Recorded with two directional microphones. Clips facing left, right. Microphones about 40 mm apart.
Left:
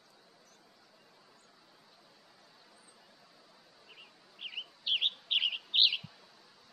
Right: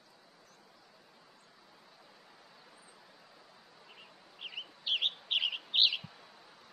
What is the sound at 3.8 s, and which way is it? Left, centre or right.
Bird, centre.